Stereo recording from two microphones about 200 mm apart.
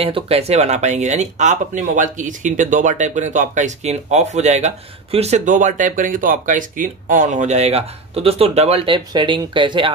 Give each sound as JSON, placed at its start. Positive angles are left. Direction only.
{"t": 0.0, "sound": "speech", "side_deg": -30}